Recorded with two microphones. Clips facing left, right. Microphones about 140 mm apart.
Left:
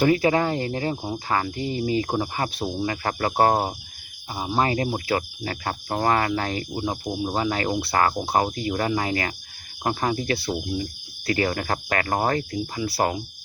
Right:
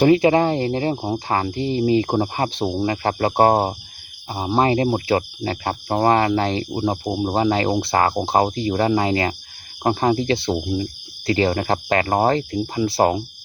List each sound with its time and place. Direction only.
0.0 s speech: 25° right (ahead or behind)